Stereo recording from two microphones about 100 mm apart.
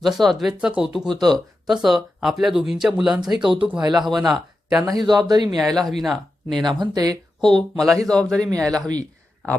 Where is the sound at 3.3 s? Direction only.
55° right (ahead or behind).